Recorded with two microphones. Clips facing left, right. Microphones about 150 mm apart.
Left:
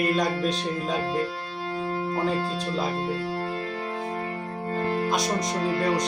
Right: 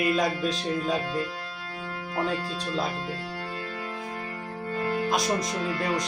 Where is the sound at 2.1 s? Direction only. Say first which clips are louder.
Even; 30° left (ahead or behind).